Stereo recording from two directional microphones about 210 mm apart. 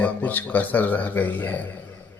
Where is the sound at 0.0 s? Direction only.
10° left (ahead or behind).